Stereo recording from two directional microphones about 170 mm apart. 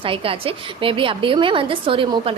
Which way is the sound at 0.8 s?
30° right (ahead or behind).